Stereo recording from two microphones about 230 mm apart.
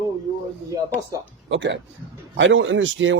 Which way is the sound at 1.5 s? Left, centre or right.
Right.